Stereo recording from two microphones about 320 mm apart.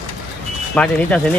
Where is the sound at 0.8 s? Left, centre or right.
Centre.